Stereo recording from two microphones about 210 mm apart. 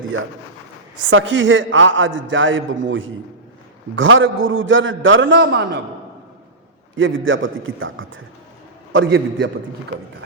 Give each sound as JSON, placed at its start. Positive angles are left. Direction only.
{"t": 1.1, "sound": "a man's voice", "side_deg": -65}
{"t": 6.9, "sound": "a man's voice", "side_deg": -65}